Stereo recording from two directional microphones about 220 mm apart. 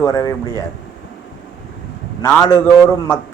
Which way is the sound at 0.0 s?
15° left (ahead or behind).